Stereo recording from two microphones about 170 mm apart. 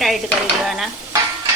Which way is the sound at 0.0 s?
Centre (ahead or behind).